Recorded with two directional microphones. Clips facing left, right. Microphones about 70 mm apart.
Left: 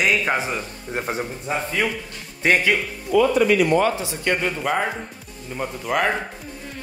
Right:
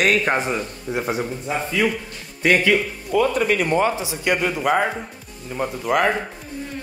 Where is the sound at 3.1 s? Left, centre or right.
Right.